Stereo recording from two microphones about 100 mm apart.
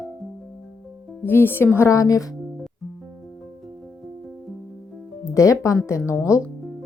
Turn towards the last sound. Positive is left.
turn(degrees=30)  # may be behind; listen again after turning